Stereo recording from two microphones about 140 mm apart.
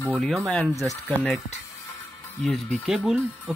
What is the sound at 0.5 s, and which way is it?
Speech, 5° left (ahead or behind).